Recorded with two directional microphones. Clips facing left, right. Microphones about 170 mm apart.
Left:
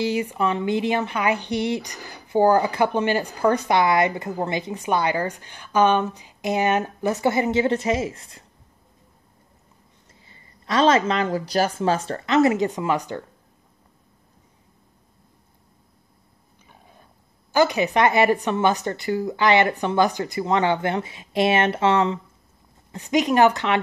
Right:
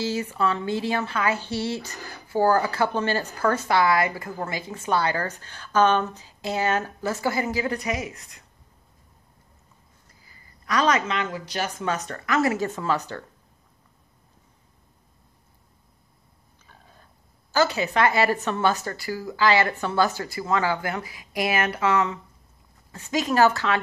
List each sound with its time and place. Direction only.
0.0 s speech: 15° left (ahead or behind)
10.2 s a woman's voice: 25° left (ahead or behind)
17.5 s a woman's voice: 15° left (ahead or behind)